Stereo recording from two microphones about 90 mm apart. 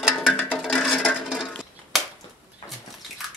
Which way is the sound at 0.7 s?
10° left (ahead or behind).